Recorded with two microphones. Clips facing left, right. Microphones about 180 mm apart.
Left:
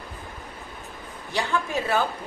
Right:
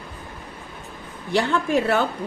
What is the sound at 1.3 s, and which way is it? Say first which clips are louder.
Speech: right 6 dB; 65° right (ahead or behind).